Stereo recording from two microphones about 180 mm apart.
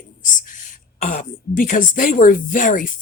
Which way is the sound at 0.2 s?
45° left (ahead or behind).